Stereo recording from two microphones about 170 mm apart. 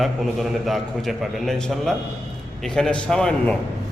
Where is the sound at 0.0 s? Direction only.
Centre (ahead or behind).